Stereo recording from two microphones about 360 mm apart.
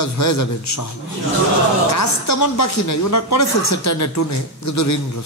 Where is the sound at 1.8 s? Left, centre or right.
Left.